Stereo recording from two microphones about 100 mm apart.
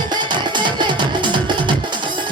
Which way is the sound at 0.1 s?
50° right (ahead or behind).